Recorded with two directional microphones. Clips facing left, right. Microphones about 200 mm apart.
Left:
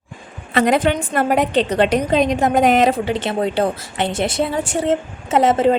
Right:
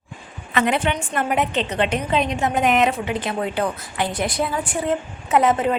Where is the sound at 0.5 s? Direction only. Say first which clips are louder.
Left 5 dB; 35° left (ahead or behind).